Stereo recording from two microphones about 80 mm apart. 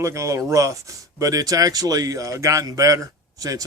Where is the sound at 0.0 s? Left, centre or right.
Right.